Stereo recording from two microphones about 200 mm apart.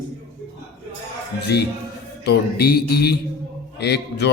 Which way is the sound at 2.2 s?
50° left (ahead or behind).